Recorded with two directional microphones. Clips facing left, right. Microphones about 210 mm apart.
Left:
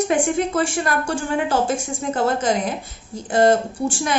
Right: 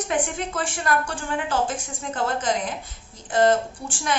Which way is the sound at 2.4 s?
10° left (ahead or behind).